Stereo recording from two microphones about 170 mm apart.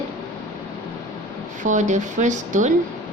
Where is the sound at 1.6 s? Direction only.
45° right (ahead or behind).